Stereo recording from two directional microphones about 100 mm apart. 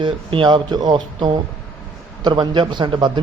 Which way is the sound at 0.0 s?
55° right (ahead or behind).